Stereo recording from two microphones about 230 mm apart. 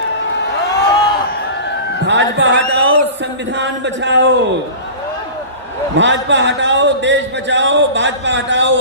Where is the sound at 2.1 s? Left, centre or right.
Right.